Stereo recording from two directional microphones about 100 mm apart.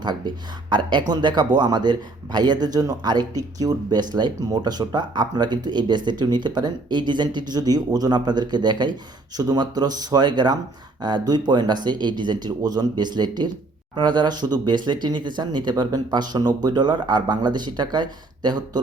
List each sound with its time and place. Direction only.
0.0 s speech: 50° right (ahead or behind)